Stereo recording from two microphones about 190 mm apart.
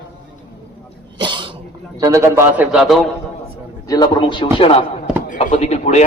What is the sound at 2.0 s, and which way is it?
A man's voice, 15° right (ahead or behind).